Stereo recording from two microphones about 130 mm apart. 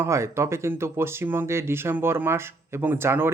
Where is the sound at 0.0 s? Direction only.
20° right (ahead or behind).